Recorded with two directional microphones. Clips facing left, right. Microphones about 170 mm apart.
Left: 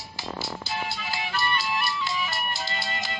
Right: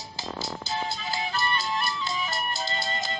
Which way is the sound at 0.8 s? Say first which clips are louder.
Right 1 dB; 35° right (ahead or behind).